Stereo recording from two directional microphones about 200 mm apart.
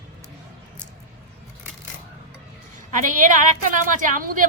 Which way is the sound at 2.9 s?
40° right (ahead or behind).